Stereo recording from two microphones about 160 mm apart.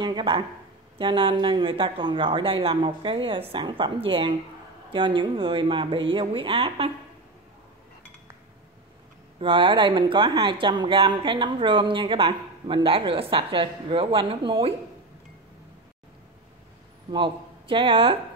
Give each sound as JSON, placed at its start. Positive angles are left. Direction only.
{"t": 0.0, "sound": "speech", "side_deg": -30}
{"t": 9.4, "sound": "speech", "side_deg": -30}
{"t": 17.1, "sound": "speech", "side_deg": -30}